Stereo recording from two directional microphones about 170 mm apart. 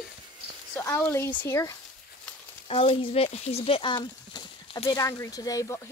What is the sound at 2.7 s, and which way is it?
Speech, 35° left (ahead or behind).